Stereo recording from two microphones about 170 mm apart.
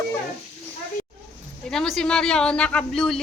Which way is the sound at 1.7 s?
5° left (ahead or behind).